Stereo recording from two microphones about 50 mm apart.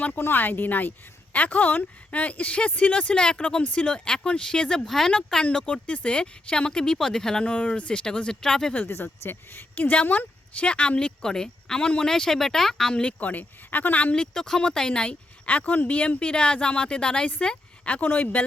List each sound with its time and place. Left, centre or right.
0.2 s speech: left; by 4.8 s centre
4.9 s a woman's voice: centre
5.1 s speech: centre
7.4 s speech: left
9.2 s speech: left
9.7 s a woman's voice: left; by 12.9 s centre
12.9 s speech: left
14.2 s a woman's voice: centre
15.4 s a woman's voice: left
18.0 s speech: left